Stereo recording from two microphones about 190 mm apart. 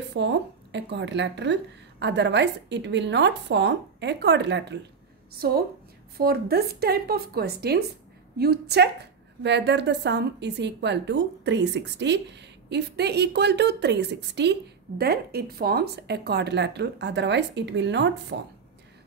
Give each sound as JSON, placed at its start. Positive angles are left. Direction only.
{"t": 0.1, "sound": "speech", "side_deg": -65}
{"t": 5.4, "sound": "a woman's voice", "side_deg": -55}